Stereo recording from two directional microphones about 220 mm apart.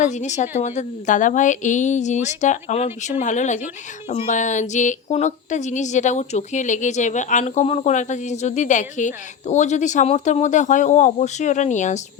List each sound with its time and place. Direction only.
0.0 s speech: 35° left (ahead or behind)